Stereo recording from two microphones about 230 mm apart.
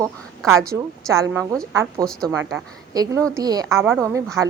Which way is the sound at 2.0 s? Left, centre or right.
Centre.